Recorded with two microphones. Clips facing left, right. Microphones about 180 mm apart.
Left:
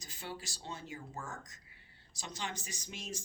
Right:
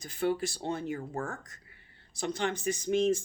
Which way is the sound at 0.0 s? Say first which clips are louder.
Right 16 dB; 60° right (ahead or behind).